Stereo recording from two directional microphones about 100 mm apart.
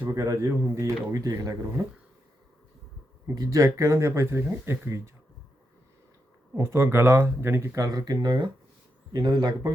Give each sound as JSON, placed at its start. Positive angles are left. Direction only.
{"t": 0.0, "sound": "speech", "side_deg": -30}
{"t": 3.3, "sound": "speech", "side_deg": -40}
{"t": 6.6, "sound": "speech", "side_deg": -25}